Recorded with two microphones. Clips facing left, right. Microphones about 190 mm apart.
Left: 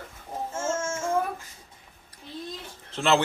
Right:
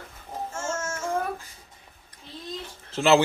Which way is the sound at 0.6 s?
30° left (ahead or behind).